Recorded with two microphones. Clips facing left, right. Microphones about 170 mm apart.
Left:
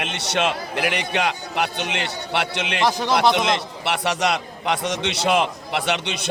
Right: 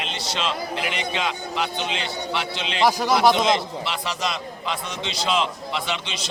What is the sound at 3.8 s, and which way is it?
A man's voice, 70° left (ahead or behind).